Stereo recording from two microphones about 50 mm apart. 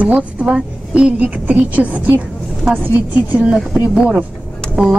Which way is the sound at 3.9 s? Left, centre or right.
Centre.